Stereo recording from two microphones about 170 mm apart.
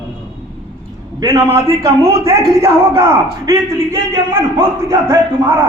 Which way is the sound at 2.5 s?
15° right (ahead or behind).